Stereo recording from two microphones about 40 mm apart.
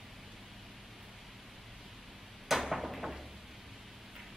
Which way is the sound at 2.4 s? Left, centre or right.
Centre.